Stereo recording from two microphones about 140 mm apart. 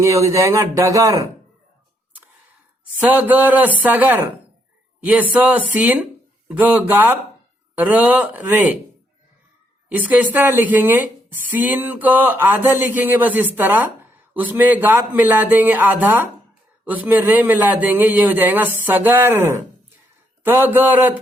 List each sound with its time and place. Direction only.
0.0 s speech: 20° right (ahead or behind)
3.0 s a woman's voice: 10° right (ahead or behind)
9.9 s a woman's voice: 10° right (ahead or behind)